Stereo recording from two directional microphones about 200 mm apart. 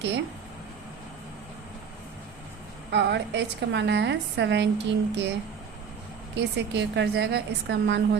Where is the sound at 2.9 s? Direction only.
60° right (ahead or behind).